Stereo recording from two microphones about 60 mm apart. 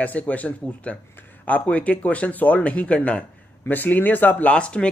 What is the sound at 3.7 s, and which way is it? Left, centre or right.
Speech, left.